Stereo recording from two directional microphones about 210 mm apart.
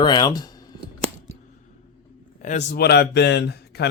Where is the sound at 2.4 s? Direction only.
35° left (ahead or behind); by 3.9 s 50° left (ahead or behind).